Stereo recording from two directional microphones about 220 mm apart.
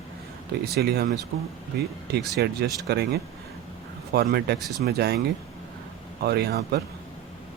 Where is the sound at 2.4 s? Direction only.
45° right (ahead or behind).